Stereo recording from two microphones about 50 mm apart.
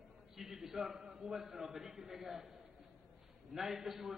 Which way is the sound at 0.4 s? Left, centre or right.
Centre.